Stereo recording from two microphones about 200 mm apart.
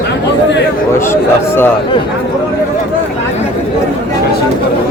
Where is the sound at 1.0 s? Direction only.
10° left (ahead or behind).